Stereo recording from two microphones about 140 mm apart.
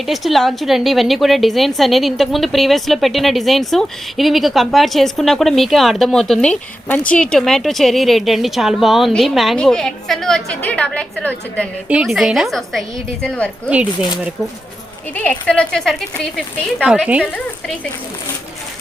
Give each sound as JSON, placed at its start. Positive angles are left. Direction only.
{"t": 0.0, "sound": "a woman's voice", "side_deg": 0}
{"t": 11.9, "sound": "a woman's voice", "side_deg": -5}
{"t": 15.1, "sound": "a woman's voice", "side_deg": 10}
{"t": 17.3, "sound": "speech", "side_deg": 10}